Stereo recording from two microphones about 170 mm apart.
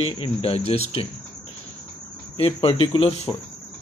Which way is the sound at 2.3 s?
30° left (ahead or behind).